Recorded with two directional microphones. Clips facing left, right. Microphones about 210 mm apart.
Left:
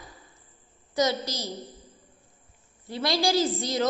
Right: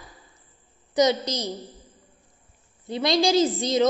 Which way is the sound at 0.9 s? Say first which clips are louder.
Right 5 dB; 20° right (ahead or behind).